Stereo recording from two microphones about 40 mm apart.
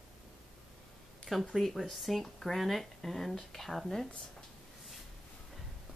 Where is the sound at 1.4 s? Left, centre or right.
Centre.